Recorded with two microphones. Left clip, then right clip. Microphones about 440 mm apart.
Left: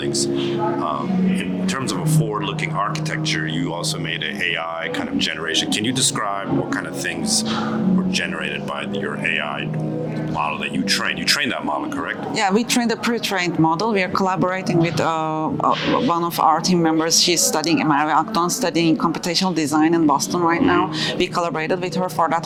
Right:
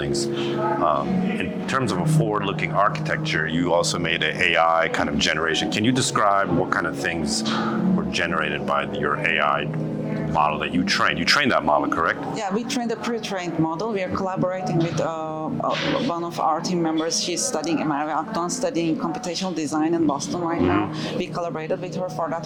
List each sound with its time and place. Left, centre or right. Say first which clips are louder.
4.4 s speech: right 7 dB; right
9.2 s speech: right 2 dB; right
12.4 s speech: left 7 dB; left